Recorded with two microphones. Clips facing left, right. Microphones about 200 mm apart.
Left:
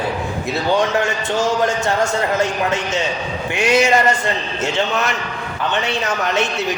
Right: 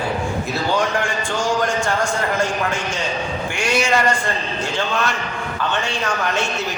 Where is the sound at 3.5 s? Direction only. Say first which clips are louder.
Left 5 dB; 20° left (ahead or behind).